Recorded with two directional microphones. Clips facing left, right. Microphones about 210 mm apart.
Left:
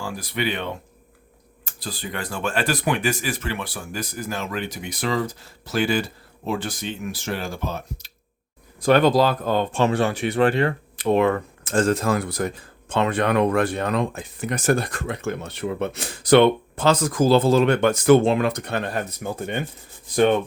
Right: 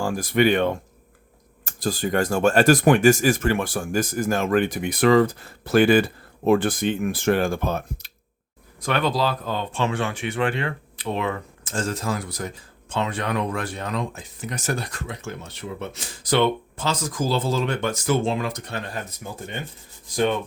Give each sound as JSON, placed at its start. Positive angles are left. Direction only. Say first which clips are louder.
{"t": 0.0, "sound": "speech", "louder": "right 7 dB", "side_deg": -45}
{"t": 8.8, "sound": "speech", "louder": "left 6 dB", "side_deg": 40}